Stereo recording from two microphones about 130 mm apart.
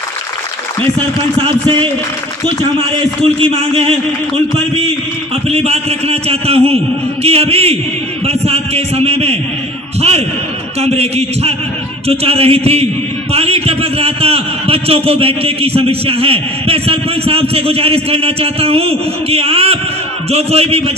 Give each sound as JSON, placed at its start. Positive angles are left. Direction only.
{"t": 3.2, "sound": "a man's voice", "side_deg": -50}
{"t": 5.5, "sound": "a man's voice", "side_deg": -50}